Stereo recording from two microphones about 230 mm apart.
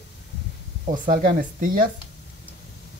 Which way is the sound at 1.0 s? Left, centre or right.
Right.